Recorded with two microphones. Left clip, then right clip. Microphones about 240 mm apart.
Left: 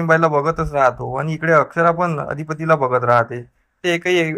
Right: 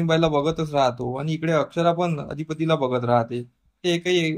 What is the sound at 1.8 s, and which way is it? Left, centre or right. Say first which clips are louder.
Speech: left 5 dB; left.